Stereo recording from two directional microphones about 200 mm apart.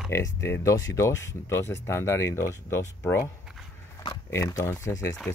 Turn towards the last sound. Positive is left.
turn(degrees=15)  # may be behind; listen again after turning